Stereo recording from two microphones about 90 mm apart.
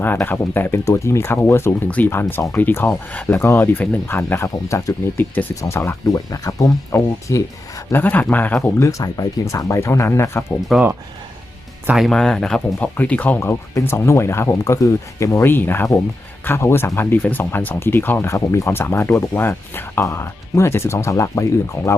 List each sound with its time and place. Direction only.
0.0 s speech: 25° left (ahead or behind)
0.9 s speech: 35° left (ahead or behind)
4.4 s speech: 35° left (ahead or behind)
5.1 s speech: 20° left (ahead or behind)
6.1 s speech: 40° left (ahead or behind)
7.9 s speech: 20° left (ahead or behind)
8.8 s speech: 35° left (ahead or behind)
10.7 s speech: centre (ahead or behind)
11.9 s speech: centre (ahead or behind); by 13.4 s 15° left (ahead or behind)
13.4 s speech: 30° left (ahead or behind)